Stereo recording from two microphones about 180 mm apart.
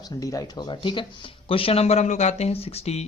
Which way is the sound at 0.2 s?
20° left (ahead or behind).